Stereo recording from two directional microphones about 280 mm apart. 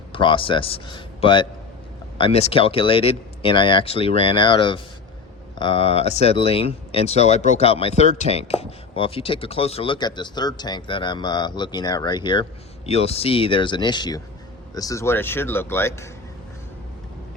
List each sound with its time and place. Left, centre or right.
0.1 s speech: centre